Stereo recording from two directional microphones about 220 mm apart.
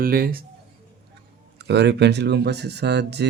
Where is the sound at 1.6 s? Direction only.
50° right (ahead or behind).